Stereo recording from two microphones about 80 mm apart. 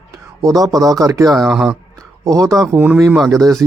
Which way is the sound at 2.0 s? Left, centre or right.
Right.